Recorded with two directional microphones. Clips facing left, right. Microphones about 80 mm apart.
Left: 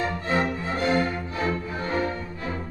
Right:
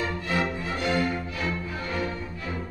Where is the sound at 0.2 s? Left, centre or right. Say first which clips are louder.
Left 3 dB; left.